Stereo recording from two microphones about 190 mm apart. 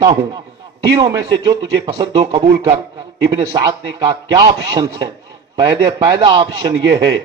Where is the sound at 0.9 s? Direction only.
20° right (ahead or behind).